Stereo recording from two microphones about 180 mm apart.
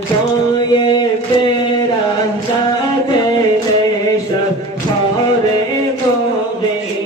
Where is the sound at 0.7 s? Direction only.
25° left (ahead or behind).